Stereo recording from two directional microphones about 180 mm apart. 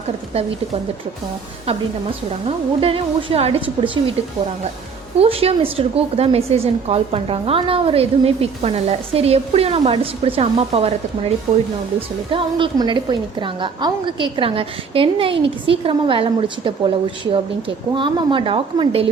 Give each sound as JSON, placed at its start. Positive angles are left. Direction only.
{"t": 1.6, "sound": "a woman's voice", "side_deg": -30}
{"t": 5.1, "sound": "a woman's voice", "side_deg": -35}
{"t": 17.9, "sound": "a woman's voice", "side_deg": -25}